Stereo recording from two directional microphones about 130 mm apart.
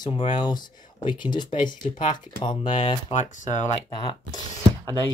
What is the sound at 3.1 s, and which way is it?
Speech, 75° left (ahead or behind).